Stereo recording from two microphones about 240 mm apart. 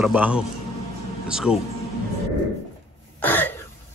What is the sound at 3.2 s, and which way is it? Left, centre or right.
Cough, centre.